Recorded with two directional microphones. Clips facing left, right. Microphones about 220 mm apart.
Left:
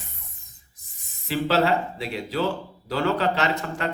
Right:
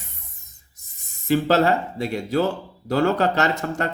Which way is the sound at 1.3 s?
45° right (ahead or behind).